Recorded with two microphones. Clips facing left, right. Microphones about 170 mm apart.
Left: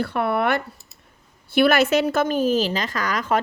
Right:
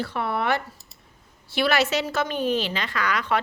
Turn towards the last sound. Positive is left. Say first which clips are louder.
# left 2 dB
turn(degrees=40)  # may be behind; listen again after turning